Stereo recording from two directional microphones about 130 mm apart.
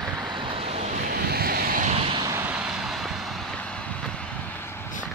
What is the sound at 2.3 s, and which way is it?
Vehicle, 15° right (ahead or behind).